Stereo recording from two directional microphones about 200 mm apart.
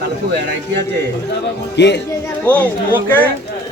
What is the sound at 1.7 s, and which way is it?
Speech, 60° left (ahead or behind).